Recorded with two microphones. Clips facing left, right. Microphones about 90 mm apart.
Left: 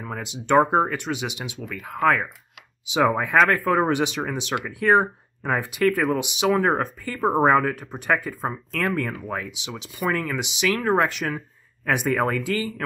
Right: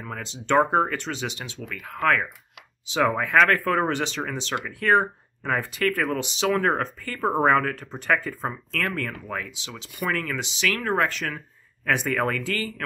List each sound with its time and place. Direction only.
0.0 s speech: 15° left (ahead or behind)